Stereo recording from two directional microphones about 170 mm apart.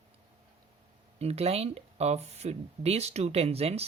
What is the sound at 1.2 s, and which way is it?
Speech, 35° right (ahead or behind).